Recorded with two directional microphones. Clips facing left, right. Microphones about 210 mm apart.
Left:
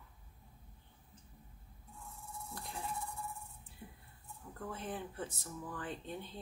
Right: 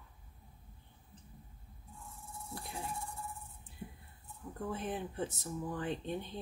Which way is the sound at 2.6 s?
10° right (ahead or behind).